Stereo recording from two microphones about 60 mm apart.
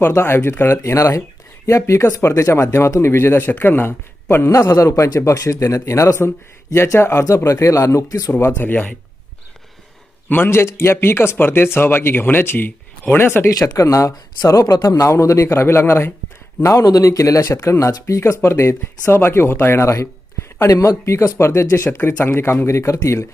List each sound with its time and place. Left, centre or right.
0.1 s speech: left
0.9 s speech: left
7.3 s speech: left
8.3 s speech: left
10.2 s speech: left
13.5 s speech: left
16.8 s speech: left
17.6 s speech: left
21.8 s speech: left
22.6 s speech: left